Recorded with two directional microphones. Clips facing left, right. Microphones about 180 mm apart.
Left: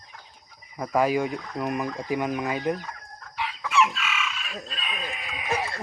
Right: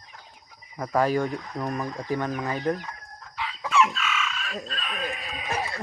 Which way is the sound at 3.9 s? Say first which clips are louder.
Right 1 dB; 10° left (ahead or behind).